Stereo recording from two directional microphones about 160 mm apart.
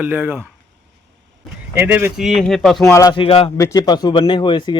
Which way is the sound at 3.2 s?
35° left (ahead or behind).